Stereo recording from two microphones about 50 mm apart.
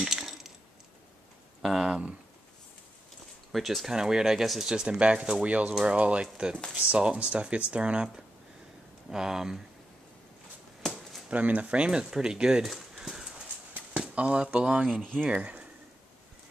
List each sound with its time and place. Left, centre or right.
0.0 s a sound: centre
1.6 s a sound: centre
1.9 s speech: right
3.5 s speech: centre
3.9 s speech: centre
9.1 s speech: centre
11.2 s speech: right; by 12.6 s centre
13.0 s horse: centre
13.9 s speech: right
14.9 s speech: centre
15.2 s speech: right